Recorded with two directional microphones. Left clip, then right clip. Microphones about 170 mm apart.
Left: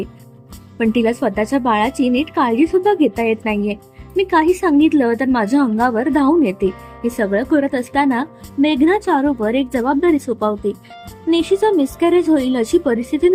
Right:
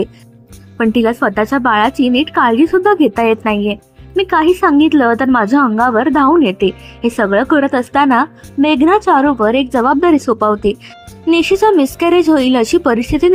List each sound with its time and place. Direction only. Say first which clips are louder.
0.9 s a woman's voice: right 4 dB; 25° right (ahead or behind)